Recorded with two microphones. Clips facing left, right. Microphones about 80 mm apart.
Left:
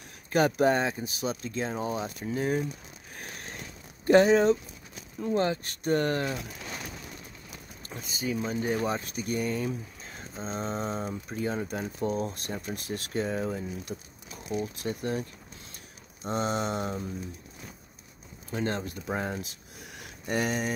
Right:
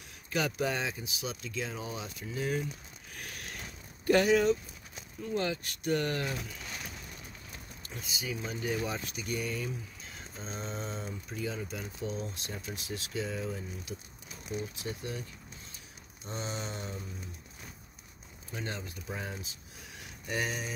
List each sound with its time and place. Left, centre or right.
0.3 s speech: left
3.2 s a sound: left
4.0 s speech: left
7.9 s speech: left
14.5 s speech: left
16.3 s mantra: left
18.5 s speech: left
18.9 s mantra: left